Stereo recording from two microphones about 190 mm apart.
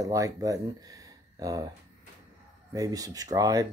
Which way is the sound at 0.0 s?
20° right (ahead or behind).